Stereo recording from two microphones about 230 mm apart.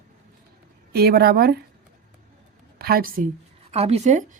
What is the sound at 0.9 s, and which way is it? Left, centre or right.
Speech, right.